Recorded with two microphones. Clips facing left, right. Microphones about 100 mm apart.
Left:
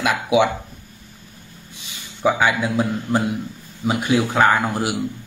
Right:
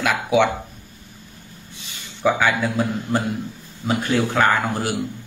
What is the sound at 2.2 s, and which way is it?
Speech, 15° left (ahead or behind).